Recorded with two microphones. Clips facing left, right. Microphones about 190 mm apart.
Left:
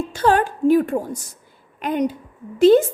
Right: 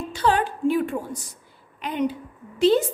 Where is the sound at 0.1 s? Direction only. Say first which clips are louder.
Left 3 dB; 45° left (ahead or behind).